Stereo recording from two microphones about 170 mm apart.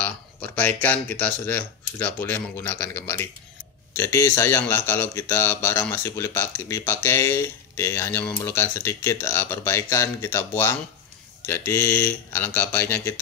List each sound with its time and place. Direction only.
0.0 s speech: 10° left (ahead or behind)